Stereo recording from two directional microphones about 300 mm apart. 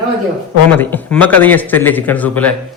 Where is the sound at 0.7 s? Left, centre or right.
Centre.